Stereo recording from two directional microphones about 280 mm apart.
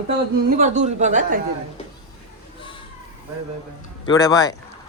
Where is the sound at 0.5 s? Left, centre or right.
Right.